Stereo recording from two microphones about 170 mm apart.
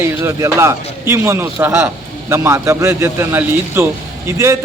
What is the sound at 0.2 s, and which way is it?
A man's voice, 15° right (ahead or behind).